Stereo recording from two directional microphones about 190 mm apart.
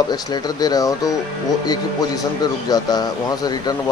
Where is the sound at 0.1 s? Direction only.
20° left (ahead or behind).